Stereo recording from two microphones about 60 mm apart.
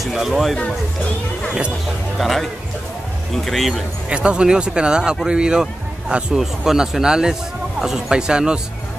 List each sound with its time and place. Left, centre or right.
0.0 s speech: centre
2.1 s speech: centre
3.4 s speech: centre
4.1 s speech: centre